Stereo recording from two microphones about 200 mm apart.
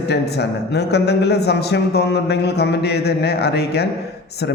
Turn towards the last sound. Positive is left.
turn(degrees=55)  # may be behind; listen again after turning